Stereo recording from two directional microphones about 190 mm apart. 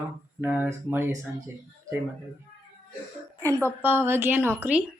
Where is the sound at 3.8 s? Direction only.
10° right (ahead or behind).